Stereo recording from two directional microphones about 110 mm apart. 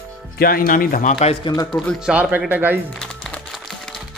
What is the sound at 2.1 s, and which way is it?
Speech, 15° right (ahead or behind).